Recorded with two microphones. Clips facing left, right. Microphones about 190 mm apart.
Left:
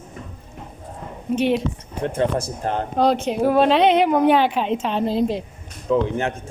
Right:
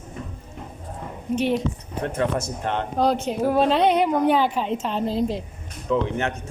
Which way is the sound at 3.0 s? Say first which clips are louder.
Left 3 dB; 75° left (ahead or behind).